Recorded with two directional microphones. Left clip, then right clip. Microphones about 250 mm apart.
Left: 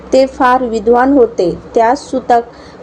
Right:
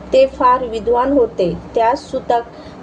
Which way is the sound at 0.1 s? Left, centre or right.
Left.